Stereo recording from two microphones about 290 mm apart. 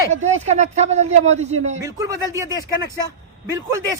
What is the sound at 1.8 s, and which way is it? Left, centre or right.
Speech, centre.